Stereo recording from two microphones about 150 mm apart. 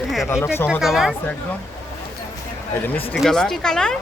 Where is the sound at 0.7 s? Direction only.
Centre (ahead or behind).